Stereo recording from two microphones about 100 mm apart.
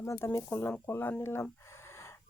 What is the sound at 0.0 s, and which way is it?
Speech, 25° left (ahead or behind).